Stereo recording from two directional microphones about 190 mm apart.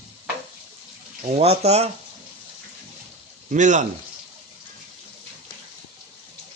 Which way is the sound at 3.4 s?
40° right (ahead or behind).